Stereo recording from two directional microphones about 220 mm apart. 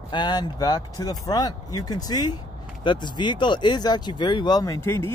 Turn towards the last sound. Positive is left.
turn(degrees=10)  # may be behind; listen again after turning